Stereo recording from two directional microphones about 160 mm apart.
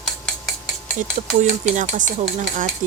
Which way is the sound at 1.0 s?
50° right (ahead or behind).